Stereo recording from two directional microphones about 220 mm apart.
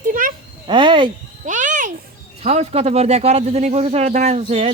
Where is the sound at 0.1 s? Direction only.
40° right (ahead or behind).